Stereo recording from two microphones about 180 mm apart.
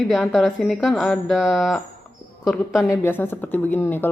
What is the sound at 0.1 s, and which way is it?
Speech, centre (ahead or behind).